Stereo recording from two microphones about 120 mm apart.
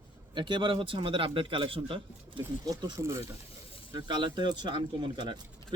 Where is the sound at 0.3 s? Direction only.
45° right (ahead or behind).